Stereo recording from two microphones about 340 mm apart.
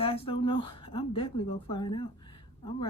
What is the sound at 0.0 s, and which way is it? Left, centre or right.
Speech, centre.